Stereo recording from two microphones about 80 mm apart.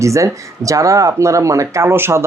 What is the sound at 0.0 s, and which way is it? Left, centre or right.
Speech, right.